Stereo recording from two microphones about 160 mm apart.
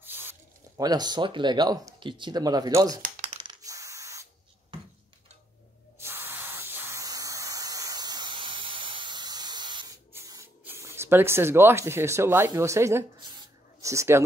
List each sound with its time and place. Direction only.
0.0 s speech: 15° right (ahead or behind)
3.3 s a sound: 35° right (ahead or behind)
3.6 s spray: 20° right (ahead or behind)
5.9 s spray: 15° right (ahead or behind)
10.6 s speech: 15° right (ahead or behind)